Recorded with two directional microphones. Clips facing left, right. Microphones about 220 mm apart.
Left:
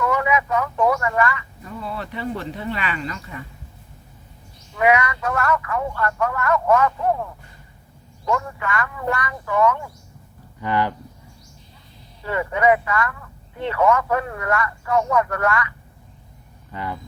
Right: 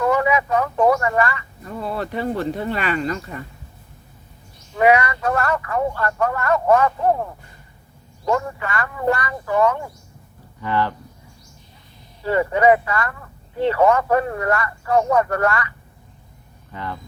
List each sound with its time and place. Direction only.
0.0 s speech: 35° right (ahead or behind)
4.8 s speech: 35° right (ahead or behind)
10.6 s speech: 15° left (ahead or behind)
12.2 s speech: 35° right (ahead or behind)